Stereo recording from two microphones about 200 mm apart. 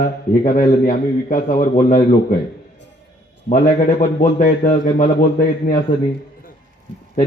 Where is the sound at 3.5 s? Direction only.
40° left (ahead or behind).